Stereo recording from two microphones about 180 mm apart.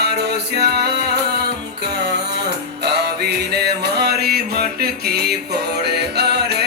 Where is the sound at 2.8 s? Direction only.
70° right (ahead or behind).